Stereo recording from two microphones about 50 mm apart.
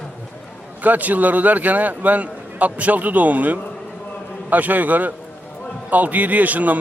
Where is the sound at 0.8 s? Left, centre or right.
Right.